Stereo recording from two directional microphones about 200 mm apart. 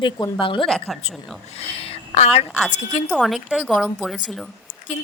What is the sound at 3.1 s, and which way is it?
A woman's voice, centre (ahead or behind).